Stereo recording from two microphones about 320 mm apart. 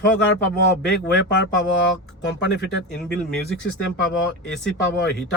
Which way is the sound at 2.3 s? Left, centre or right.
Left.